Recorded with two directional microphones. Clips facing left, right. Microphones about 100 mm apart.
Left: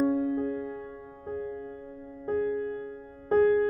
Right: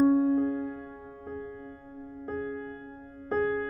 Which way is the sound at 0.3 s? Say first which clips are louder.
Right 3 dB; 35° right (ahead or behind).